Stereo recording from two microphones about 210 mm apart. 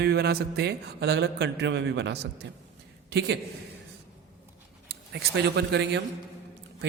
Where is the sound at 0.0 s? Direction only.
50° right (ahead or behind).